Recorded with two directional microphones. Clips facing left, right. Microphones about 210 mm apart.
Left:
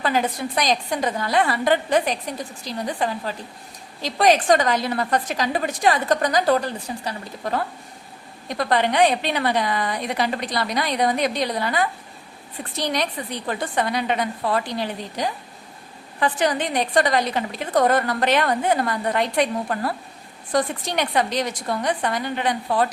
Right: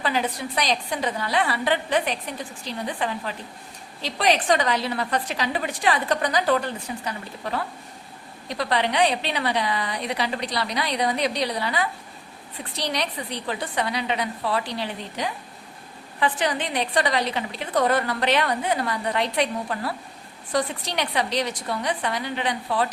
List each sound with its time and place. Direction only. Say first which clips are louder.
0.0 s a woman's voice: left 3 dB; 45° left (ahead or behind)
8.4 s a woman's voice: left 3 dB; 50° left (ahead or behind)